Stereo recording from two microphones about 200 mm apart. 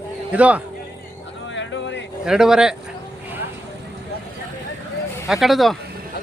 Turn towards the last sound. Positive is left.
turn(degrees=0)  # may be behind; listen again after turning